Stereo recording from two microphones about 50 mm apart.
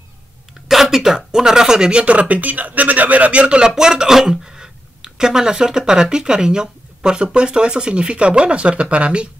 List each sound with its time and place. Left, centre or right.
0.7 s speech: centre; by 9.3 s right